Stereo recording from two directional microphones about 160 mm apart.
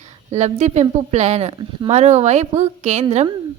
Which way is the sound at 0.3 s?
45° right (ahead or behind).